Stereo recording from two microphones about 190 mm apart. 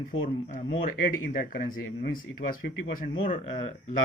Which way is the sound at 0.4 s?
30° left (ahead or behind).